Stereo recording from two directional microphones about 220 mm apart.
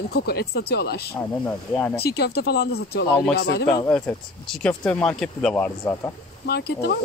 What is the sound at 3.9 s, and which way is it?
Speech, 5° left (ahead or behind).